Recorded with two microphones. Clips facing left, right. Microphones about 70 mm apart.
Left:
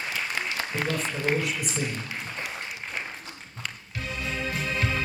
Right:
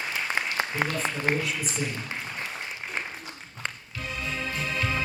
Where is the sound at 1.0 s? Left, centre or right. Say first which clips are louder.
Right 1 dB; centre.